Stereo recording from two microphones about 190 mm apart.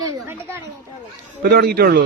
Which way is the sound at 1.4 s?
55° right (ahead or behind).